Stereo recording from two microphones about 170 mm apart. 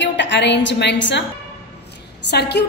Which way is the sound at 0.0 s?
90° left.